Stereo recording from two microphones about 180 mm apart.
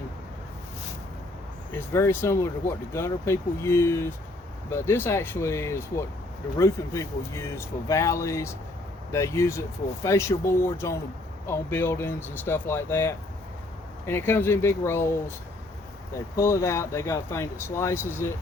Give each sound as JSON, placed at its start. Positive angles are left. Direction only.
{"t": 1.9, "sound": "speech", "side_deg": 15}
{"t": 16.1, "sound": "speech", "side_deg": 15}